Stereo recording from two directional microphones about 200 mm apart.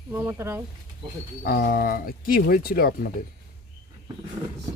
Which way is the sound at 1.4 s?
50° left (ahead or behind).